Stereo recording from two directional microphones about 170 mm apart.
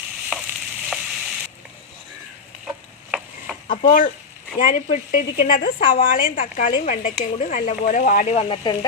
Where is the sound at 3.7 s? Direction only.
55° left (ahead or behind); by 8.7 s 35° left (ahead or behind).